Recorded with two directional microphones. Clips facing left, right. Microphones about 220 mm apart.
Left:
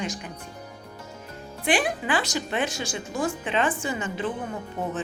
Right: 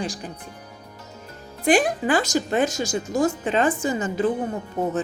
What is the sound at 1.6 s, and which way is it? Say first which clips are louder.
Speech: right 6 dB; 40° right (ahead or behind).